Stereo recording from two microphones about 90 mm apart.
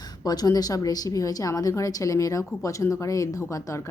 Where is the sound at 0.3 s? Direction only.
45° left (ahead or behind).